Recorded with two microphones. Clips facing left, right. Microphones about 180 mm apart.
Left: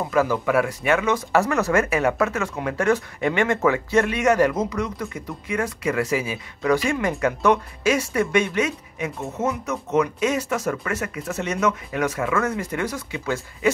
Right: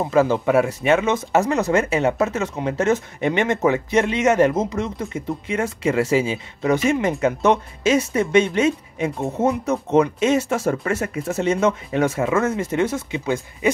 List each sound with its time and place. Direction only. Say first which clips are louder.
0.0 s speech: right 3 dB; 25° right (ahead or behind)